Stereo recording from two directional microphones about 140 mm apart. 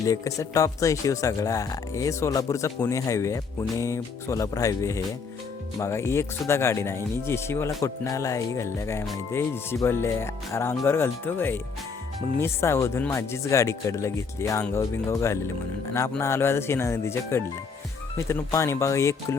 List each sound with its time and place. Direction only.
0.1 s speech: 25° left (ahead or behind)